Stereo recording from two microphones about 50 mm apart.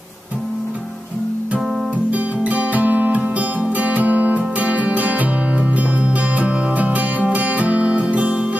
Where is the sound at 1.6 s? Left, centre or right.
Centre.